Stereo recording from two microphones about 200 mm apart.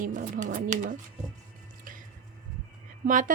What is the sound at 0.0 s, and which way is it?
Speech, 40° right (ahead or behind).